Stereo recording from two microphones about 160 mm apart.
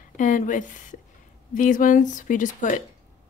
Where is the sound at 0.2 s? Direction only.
50° left (ahead or behind).